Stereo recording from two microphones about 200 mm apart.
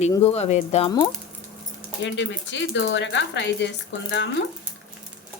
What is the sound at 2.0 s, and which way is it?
Speech, 65° left (ahead or behind).